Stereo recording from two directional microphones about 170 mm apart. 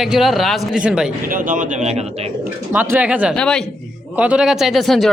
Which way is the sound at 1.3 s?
50° right (ahead or behind).